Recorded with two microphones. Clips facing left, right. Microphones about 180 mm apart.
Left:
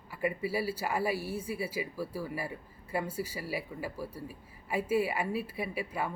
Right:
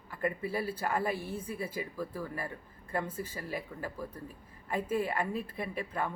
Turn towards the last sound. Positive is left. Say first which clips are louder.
# left 1 dB
turn(degrees=10)  # may be behind; listen again after turning